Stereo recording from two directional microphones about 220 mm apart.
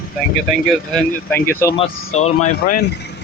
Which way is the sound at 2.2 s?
30° left (ahead or behind).